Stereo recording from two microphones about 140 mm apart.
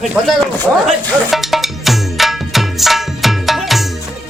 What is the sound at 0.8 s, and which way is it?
Music, centre (ahead or behind).